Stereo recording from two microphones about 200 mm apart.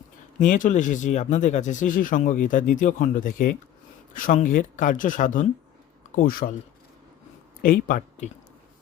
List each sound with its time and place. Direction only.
0.3 s speech: 40° left (ahead or behind)
7.6 s speech: 45° left (ahead or behind)